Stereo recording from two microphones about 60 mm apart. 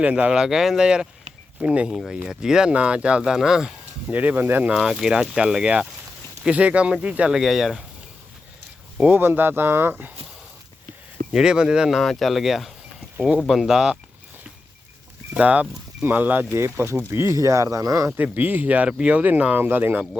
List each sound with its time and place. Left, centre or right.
0.0 s speech: right
0.3 s speech: centre
4.1 s speech: right
4.7 s speech: centre
7.3 s speech: centre
9.1 s speech: right
11.3 s speech: centre
15.4 s speech: right
16.6 s speech: right
18.2 s speech: right